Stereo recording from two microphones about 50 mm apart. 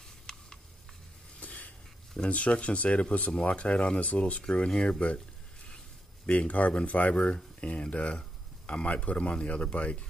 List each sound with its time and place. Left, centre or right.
0.3 s tick-tock: centre
1.4 s a sound: left
2.2 s speech: left
6.2 s speech: left